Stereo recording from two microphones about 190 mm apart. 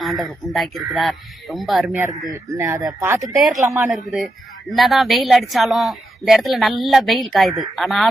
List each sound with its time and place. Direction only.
0.0 s speech: centre (ahead or behind)
3.3 s speech: centre (ahead or behind)